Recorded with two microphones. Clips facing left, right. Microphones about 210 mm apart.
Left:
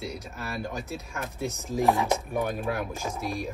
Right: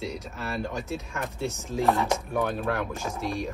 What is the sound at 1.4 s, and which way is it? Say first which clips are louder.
Speech: left 1 dB; 15° left (ahead or behind).